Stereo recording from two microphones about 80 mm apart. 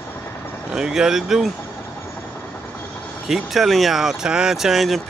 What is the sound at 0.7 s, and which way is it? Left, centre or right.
Speech, centre.